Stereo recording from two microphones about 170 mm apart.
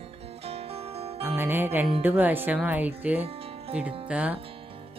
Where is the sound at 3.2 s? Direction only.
35° right (ahead or behind).